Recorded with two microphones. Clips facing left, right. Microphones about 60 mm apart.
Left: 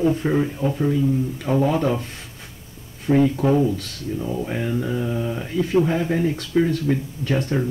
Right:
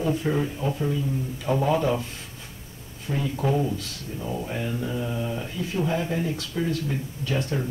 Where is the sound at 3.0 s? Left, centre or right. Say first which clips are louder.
Left 9 dB; left.